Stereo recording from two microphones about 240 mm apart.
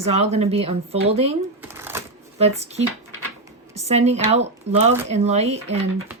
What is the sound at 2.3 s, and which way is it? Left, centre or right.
Speech, right.